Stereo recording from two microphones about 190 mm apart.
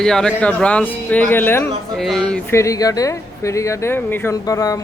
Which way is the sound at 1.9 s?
Centre (ahead or behind).